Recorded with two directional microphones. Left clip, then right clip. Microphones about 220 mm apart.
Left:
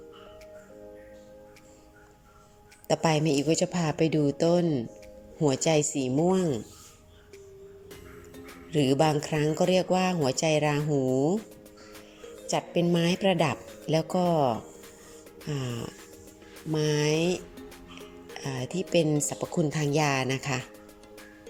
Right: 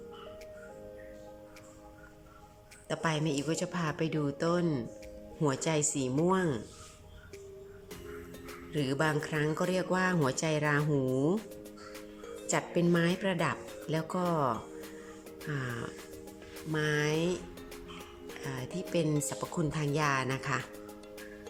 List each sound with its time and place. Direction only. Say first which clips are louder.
2.8 s speech: left 8 dB; 20° left (ahead or behind)
8.7 s speech: left 7 dB; 15° left (ahead or behind)
10.8 s speech: left 4 dB; centre (ahead or behind)
12.5 s speech: left 3 dB; 15° left (ahead or behind)
15.4 s speech: left 2 dB; 15° left (ahead or behind)